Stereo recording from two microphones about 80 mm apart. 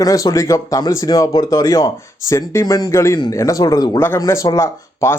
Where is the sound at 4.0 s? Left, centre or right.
Left.